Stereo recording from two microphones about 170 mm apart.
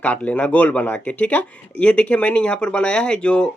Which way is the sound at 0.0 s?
10° left (ahead or behind).